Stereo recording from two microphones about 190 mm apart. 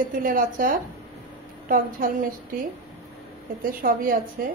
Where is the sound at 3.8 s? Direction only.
45° right (ahead or behind).